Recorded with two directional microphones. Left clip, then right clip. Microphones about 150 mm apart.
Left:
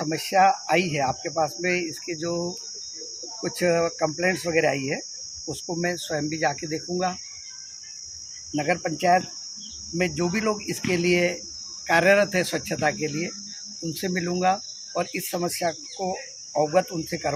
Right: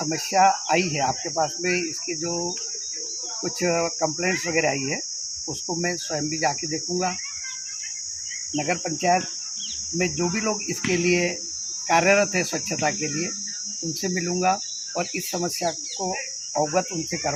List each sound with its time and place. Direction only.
0.0 s speech: 30° left (ahead or behind)
3.6 s speech: 25° left (ahead or behind)
8.5 s speech: 25° left (ahead or behind)
15.6 s speech: 15° left (ahead or behind)
16.7 s speech: 30° left (ahead or behind)